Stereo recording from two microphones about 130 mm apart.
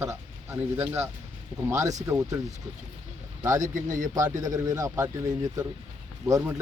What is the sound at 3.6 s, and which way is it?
Speech, 80° right.